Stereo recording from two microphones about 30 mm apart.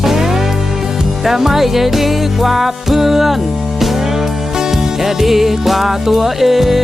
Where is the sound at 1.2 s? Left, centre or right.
Centre.